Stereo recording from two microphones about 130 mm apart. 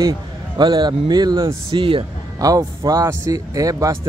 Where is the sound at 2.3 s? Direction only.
30° right (ahead or behind).